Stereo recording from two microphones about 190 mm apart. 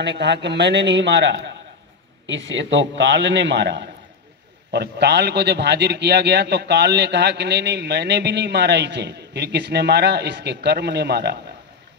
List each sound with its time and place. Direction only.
0.0 s a man's voice: 65° right (ahead or behind)